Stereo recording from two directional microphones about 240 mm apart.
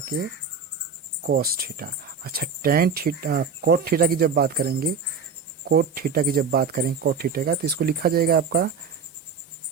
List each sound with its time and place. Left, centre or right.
1.3 s speech: right